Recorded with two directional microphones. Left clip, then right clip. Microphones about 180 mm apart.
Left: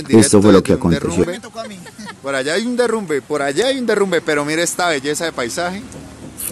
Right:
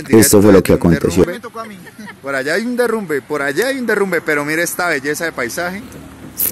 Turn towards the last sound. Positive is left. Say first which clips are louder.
# right 1 dB
turn(degrees=-5)  # may be behind; listen again after turning